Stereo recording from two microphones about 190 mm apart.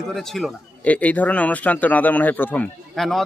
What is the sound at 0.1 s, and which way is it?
Speech, centre (ahead or behind).